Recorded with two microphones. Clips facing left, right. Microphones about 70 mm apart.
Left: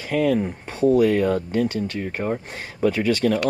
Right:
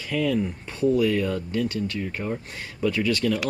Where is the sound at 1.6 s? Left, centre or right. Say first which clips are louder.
Left 2 dB; left.